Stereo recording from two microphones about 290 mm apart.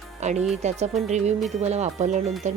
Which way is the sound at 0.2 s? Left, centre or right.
Right.